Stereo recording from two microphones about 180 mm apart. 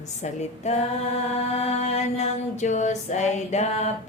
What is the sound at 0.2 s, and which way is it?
Female singing, 40° left (ahead or behind).